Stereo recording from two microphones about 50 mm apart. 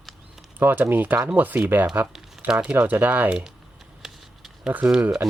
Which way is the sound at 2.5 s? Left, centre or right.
Right.